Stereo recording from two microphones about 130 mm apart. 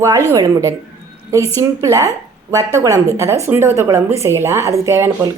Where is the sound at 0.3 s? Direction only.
25° right (ahead or behind).